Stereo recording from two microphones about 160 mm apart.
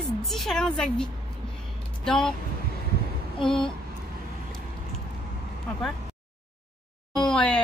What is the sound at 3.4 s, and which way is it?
Speech, 30° left (ahead or behind).